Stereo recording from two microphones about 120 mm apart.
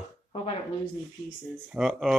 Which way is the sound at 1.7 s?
Centre (ahead or behind).